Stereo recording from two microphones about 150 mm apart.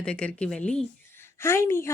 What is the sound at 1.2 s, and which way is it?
Speech, 15° left (ahead or behind).